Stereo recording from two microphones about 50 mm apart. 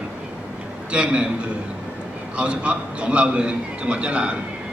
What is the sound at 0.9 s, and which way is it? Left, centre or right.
A man's voice, right.